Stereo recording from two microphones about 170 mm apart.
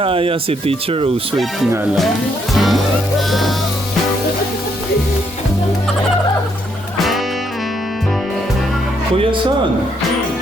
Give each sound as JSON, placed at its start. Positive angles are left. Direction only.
{"t": 0.0, "sound": "speech", "side_deg": -30}
{"t": 2.6, "sound": "music", "side_deg": 0}